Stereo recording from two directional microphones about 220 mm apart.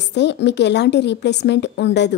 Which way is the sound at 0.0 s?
50° left (ahead or behind).